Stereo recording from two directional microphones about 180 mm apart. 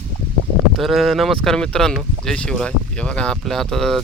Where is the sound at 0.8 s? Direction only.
Centre (ahead or behind).